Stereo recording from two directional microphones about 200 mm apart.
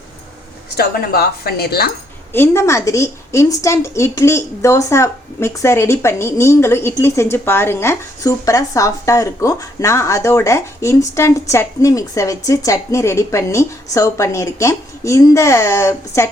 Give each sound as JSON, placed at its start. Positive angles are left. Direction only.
{"t": 0.8, "sound": "a woman's voice", "side_deg": 50}
{"t": 2.3, "sound": "speech", "side_deg": 15}